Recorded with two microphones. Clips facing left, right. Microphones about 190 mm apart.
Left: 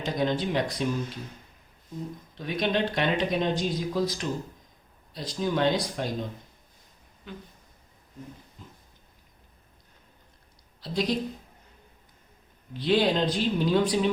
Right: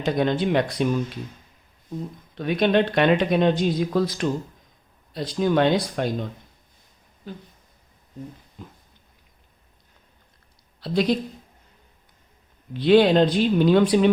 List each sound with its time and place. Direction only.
0.0 s speech: 60° right (ahead or behind)
2.4 s speech: 65° right (ahead or behind)
7.3 s speech: 35° right (ahead or behind)
10.8 s speech: 60° right (ahead or behind)
12.8 s speech: 65° right (ahead or behind)